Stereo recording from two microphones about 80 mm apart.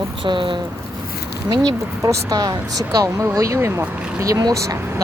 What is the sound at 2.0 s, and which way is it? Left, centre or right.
Speech, right.